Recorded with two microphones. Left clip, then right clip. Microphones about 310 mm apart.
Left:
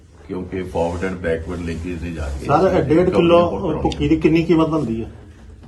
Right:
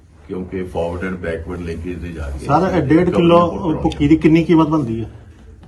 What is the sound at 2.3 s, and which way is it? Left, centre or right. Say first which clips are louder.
A man's voice: even; right.